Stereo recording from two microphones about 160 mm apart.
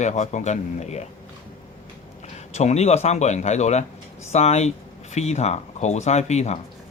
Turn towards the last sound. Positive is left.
turn(degrees=45)  # may be behind; listen again after turning